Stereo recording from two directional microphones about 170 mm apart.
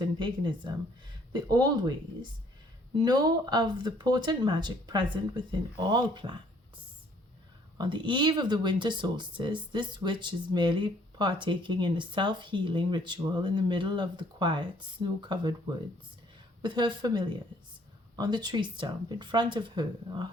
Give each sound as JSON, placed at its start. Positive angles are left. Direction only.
{"t": 0.0, "sound": "speech", "side_deg": -25}
{"t": 3.0, "sound": "speech", "side_deg": -25}
{"t": 7.8, "sound": "speech", "side_deg": -30}
{"t": 16.6, "sound": "speech", "side_deg": -25}